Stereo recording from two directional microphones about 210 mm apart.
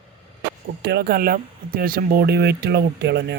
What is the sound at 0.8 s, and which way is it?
Speech, 50° right (ahead or behind).